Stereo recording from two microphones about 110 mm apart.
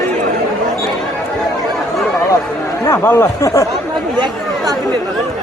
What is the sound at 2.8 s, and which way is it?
Speech, 25° left (ahead or behind).